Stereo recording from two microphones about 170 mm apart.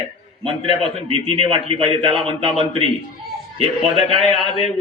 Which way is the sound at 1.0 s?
35° right (ahead or behind).